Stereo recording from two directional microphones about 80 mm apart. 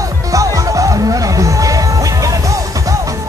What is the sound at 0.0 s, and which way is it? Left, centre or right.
Music, right.